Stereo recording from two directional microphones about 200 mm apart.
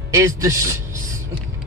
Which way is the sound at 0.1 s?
15° right (ahead or behind).